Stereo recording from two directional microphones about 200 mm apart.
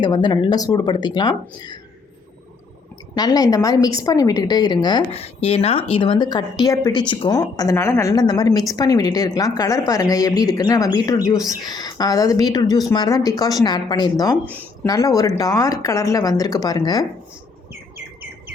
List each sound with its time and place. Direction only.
0.0 s a woman's voice: 20° left (ahead or behind)
3.2 s a woman's voice: 20° left (ahead or behind)
17.9 s bird: 10° right (ahead or behind)